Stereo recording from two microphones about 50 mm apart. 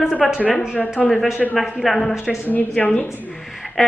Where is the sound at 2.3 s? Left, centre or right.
Left.